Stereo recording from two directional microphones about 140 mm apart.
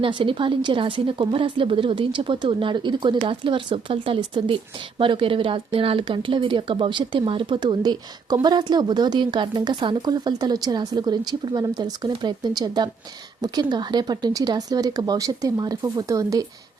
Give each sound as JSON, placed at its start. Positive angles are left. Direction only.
{"t": 0.0, "sound": "a woman's voice", "side_deg": -35}